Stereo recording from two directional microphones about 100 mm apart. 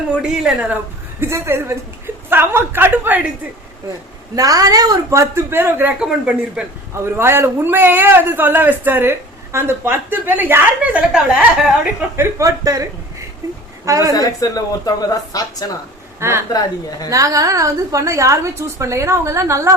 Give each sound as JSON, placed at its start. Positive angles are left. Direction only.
{"t": 0.1, "sound": "a woman's voice", "side_deg": -10}
{"t": 1.2, "sound": "a man's voice", "side_deg": -25}
{"t": 4.4, "sound": "a woman's voice", "side_deg": -35}
{"t": 6.0, "sound": "a woman's voice", "side_deg": -10}
{"t": 6.9, "sound": "a man's voice", "side_deg": -25}
{"t": 12.1, "sound": "a woman's voice", "side_deg": -30}
{"t": 14.1, "sound": "speech", "side_deg": 35}
{"t": 17.1, "sound": "a woman's voice", "side_deg": -35}